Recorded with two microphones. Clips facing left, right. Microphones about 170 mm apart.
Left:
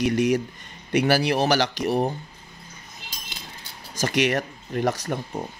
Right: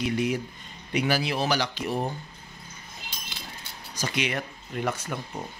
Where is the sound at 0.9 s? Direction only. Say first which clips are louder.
Left 6 dB; 75° left (ahead or behind).